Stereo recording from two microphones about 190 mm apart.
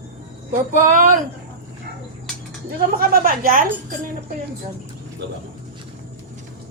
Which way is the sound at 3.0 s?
50° right (ahead or behind).